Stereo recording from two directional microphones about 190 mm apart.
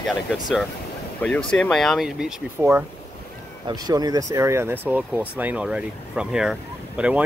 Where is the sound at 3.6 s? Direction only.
20° right (ahead or behind).